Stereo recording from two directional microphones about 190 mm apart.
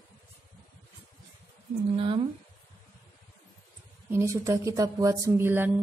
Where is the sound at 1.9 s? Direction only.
30° right (ahead or behind).